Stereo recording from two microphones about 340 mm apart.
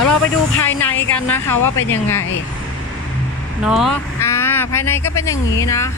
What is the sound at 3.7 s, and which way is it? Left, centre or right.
Speech, centre.